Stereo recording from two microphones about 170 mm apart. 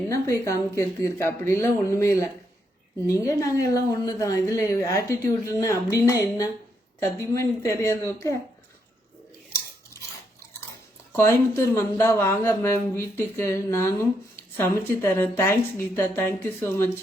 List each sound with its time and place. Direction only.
0.1 s a woman's voice: 20° left (ahead or behind)
11.3 s speech: 15° left (ahead or behind)